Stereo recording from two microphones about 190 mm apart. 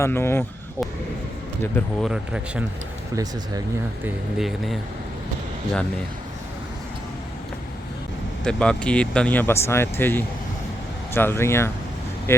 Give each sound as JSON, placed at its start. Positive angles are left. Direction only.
{"t": 0.0, "sound": "speech", "side_deg": 15}
{"t": 1.6, "sound": "speech", "side_deg": 10}
{"t": 2.0, "sound": "speech", "side_deg": -5}
{"t": 3.2, "sound": "speech", "side_deg": -20}
{"t": 4.0, "sound": "speech", "side_deg": 0}
{"t": 8.4, "sound": "speech", "side_deg": 5}